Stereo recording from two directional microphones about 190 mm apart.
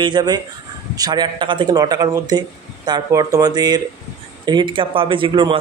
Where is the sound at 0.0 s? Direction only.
20° right (ahead or behind).